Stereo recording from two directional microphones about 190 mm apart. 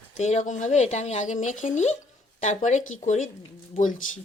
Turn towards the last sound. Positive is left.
turn(degrees=45)  # may be behind; listen again after turning